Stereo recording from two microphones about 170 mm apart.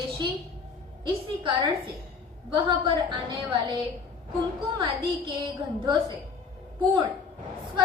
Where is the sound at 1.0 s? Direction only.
25° right (ahead or behind).